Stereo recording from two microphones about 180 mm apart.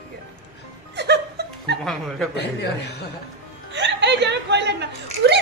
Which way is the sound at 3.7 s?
75° right (ahead or behind).